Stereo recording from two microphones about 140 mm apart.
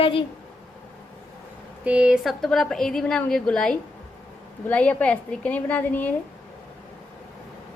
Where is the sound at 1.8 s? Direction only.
10° right (ahead or behind); by 6.1 s 10° left (ahead or behind).